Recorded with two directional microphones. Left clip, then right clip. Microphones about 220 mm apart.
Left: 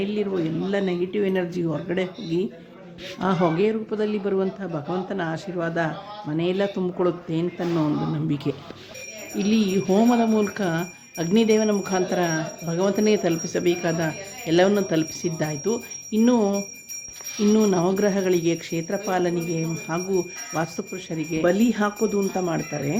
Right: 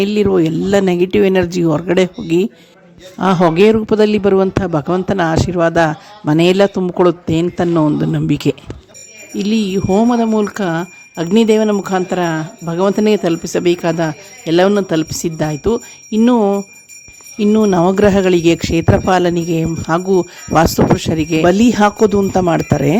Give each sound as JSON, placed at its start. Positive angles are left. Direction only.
{"t": 0.0, "sound": "a man's voice", "side_deg": -45}